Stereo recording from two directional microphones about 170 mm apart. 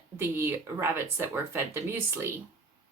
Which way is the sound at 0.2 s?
15° right (ahead or behind).